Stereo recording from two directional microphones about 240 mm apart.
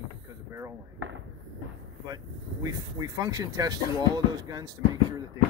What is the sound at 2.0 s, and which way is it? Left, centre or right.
Speech, centre.